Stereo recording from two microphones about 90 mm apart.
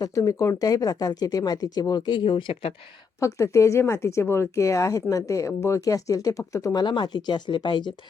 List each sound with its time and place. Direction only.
0.0 s speech: 40° left (ahead or behind); by 2.7 s 80° left
3.2 s speech: 35° left (ahead or behind)
6.8 s speech: 55° left (ahead or behind)